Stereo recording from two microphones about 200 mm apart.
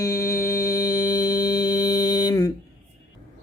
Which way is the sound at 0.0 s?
15° left (ahead or behind).